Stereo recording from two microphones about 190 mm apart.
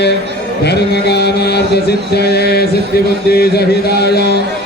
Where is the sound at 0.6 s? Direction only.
60° left (ahead or behind).